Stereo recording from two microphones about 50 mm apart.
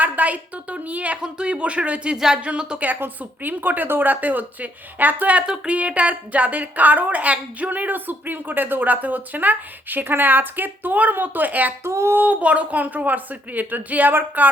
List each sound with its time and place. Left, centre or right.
0.0 s a woman's voice: right
2.1 s speech: centre
3.0 s a woman's voice: right
11.8 s a sound: right
12.1 s a woman's voice: right